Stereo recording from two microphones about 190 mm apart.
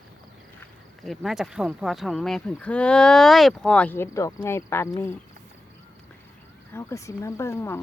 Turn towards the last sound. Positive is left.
turn(degrees=15)  # may be behind; listen again after turning